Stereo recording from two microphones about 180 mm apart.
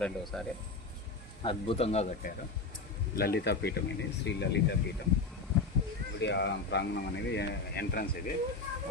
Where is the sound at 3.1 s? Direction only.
60° left (ahead or behind).